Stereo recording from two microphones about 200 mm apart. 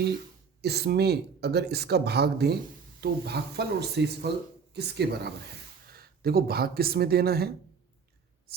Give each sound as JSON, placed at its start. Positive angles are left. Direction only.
{"t": 0.6, "sound": "speech", "side_deg": -55}